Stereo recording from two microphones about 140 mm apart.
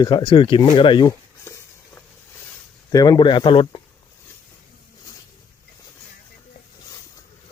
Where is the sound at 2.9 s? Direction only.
30° left (ahead or behind).